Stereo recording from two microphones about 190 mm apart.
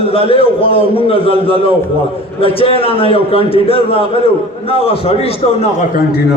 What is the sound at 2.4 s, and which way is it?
A man's voice, 30° left (ahead or behind).